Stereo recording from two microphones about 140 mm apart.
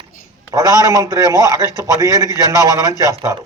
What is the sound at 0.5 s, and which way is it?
A man's voice, 20° right (ahead or behind).